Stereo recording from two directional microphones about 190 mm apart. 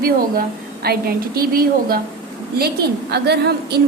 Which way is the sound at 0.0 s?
50° right (ahead or behind).